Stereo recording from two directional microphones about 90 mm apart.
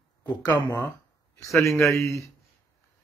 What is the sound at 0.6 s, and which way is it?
Speech, 20° left (ahead or behind).